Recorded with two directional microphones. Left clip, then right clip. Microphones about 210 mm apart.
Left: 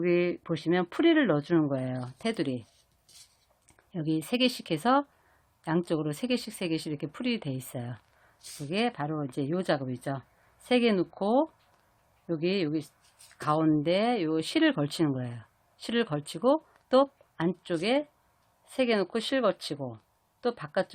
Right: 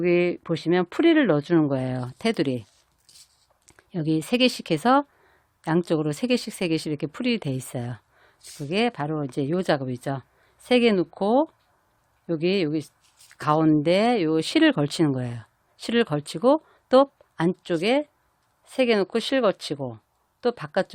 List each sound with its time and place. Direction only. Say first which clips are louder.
0.0 s speech: right 5 dB; 30° right (ahead or behind)
3.7 s speech: right 6 dB; 35° right (ahead or behind)